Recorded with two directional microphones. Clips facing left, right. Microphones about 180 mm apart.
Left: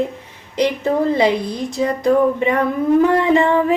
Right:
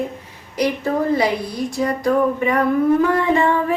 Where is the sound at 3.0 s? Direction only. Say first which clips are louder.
Left 3 dB; 20° left (ahead or behind).